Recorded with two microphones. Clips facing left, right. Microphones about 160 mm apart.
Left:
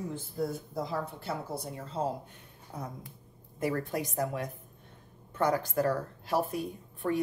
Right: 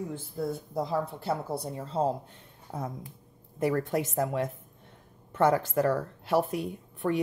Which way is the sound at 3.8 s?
25° right (ahead or behind).